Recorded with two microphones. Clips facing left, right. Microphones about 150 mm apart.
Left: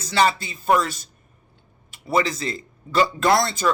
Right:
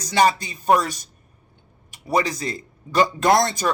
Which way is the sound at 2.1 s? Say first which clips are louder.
Even; 40° right (ahead or behind).